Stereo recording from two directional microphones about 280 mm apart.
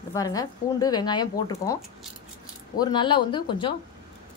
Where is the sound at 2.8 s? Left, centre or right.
Centre.